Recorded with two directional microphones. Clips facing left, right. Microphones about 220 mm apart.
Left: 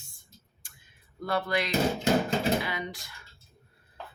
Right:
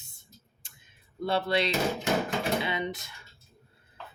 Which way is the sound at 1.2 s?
25° right (ahead or behind).